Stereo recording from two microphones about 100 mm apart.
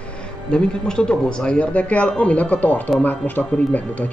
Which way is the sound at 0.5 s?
10° left (ahead or behind).